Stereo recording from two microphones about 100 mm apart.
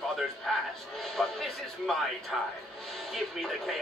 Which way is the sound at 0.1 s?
Centre (ahead or behind).